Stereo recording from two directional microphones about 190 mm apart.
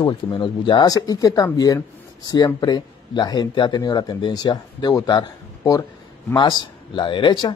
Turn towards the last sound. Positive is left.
turn(degrees=25)  # may be behind; listen again after turning